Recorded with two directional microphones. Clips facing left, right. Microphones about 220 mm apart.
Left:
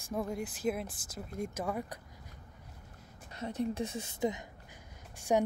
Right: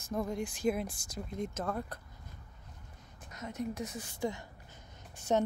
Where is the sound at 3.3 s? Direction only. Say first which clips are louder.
Left 3 dB; 30° left (ahead or behind).